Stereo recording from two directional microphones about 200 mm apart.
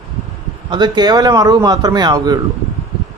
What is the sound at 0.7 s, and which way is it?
A man's voice, 20° right (ahead or behind).